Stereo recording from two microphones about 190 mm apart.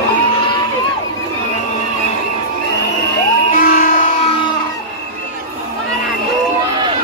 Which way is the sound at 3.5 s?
45° left (ahead or behind).